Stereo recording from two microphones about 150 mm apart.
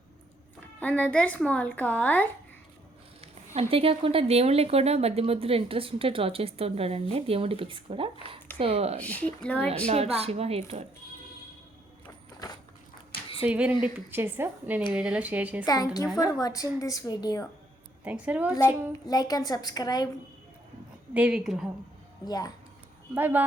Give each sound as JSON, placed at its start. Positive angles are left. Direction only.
{"t": 0.8, "sound": "speech", "side_deg": 10}
{"t": 3.5, "sound": "a woman's voice", "side_deg": -40}
{"t": 9.0, "sound": "speech", "side_deg": 10}
{"t": 9.6, "sound": "a woman's voice", "side_deg": -45}
{"t": 13.4, "sound": "a woman's voice", "side_deg": -10}
{"t": 15.6, "sound": "a woman's voice", "side_deg": 25}
{"t": 18.0, "sound": "a woman's voice", "side_deg": -10}
{"t": 19.0, "sound": "a woman's voice", "side_deg": 25}
{"t": 21.1, "sound": "a woman's voice", "side_deg": -10}
{"t": 22.2, "sound": "a woman's voice", "side_deg": 25}
{"t": 23.1, "sound": "a woman's voice", "side_deg": -10}